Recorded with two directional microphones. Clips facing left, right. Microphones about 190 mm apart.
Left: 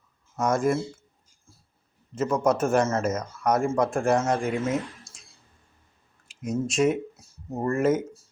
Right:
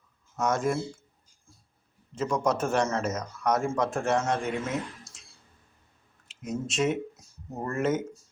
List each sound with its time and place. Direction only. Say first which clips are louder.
0.3 s a man's voice: left 3 dB; 10° left (ahead or behind)
2.1 s a man's voice: left 4 dB; 5° left (ahead or behind)
6.4 s a man's voice: left 5 dB; 10° left (ahead or behind)